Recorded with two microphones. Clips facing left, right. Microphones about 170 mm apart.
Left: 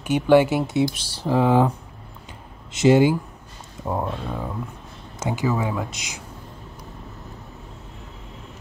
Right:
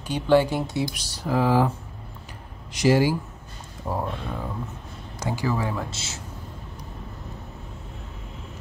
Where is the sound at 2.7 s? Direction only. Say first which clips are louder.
Left 4 dB; 25° left (ahead or behind).